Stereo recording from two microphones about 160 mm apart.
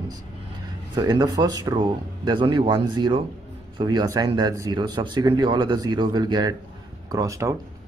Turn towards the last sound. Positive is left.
turn(degrees=-20)  # may be behind; listen again after turning